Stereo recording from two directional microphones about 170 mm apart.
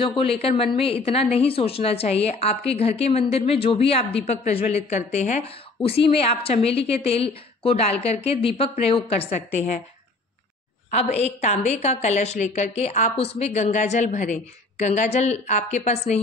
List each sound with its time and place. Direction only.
0.0 s a woman's voice: 30° left (ahead or behind)
11.1 s a woman's voice: 40° left (ahead or behind)